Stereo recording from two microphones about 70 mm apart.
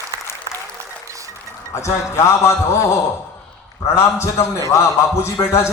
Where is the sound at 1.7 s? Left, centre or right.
Left.